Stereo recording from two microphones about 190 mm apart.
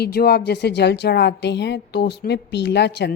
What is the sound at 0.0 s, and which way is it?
Speech, 55° left (ahead or behind).